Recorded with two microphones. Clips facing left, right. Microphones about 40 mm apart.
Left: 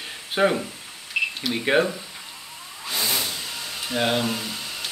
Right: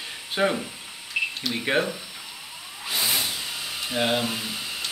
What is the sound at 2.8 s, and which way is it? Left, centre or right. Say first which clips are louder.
Vehicle: even; centre.